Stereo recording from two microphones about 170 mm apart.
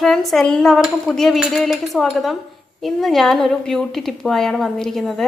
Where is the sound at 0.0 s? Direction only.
Centre (ahead or behind).